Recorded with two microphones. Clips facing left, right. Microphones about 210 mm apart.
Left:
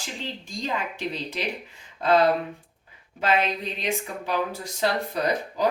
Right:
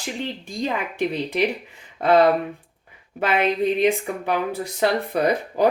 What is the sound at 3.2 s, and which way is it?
A woman's voice, 55° right (ahead or behind).